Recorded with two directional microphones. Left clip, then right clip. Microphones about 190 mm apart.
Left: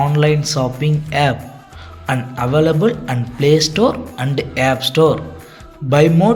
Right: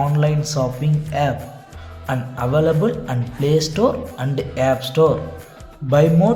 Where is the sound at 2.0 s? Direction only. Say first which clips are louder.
Left 3 dB; 5° left (ahead or behind).